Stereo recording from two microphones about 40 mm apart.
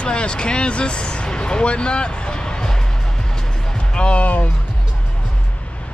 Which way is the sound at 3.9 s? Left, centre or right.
Left.